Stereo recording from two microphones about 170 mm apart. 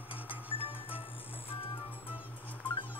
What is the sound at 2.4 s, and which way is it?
Music, 10° left (ahead or behind).